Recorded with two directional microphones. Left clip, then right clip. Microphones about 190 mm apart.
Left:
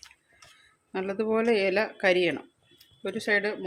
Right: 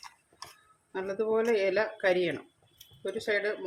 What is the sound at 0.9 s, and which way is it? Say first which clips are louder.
Speech: left 2 dB; 40° left (ahead or behind).